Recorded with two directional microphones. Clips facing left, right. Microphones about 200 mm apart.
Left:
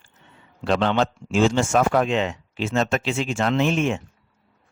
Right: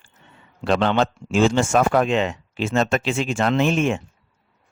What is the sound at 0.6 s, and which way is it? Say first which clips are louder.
Speech: right 1 dB; 60° right (ahead or behind).